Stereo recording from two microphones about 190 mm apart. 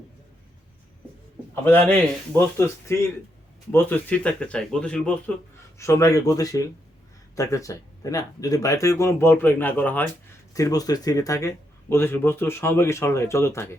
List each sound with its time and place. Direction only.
1.6 s speech: 10° left (ahead or behind)